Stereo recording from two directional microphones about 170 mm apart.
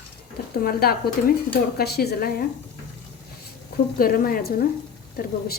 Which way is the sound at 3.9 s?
60° left (ahead or behind).